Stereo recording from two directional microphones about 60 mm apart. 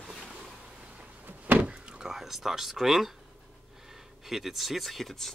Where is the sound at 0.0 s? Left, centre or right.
Centre.